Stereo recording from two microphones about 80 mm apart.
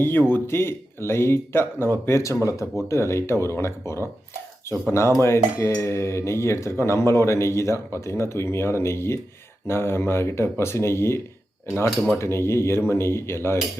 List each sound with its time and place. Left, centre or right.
0.0 s speech: left
11.9 s speech: centre
12.2 s speech: left